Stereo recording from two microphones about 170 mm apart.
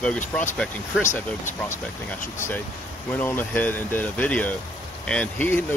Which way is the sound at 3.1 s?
10° left (ahead or behind).